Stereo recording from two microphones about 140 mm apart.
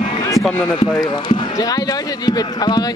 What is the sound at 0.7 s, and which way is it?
Speech, 30° left (ahead or behind).